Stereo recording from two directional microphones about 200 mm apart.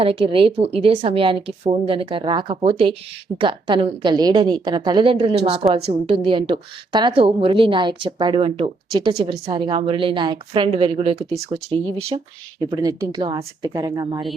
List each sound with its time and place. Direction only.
0.0 s a woman's voice: 25° right (ahead or behind)
12.5 s a woman's voice: 20° right (ahead or behind)